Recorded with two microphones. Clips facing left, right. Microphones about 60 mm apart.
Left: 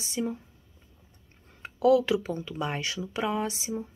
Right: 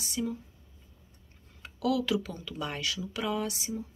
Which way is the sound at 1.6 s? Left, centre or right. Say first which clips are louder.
Left 8 dB; left.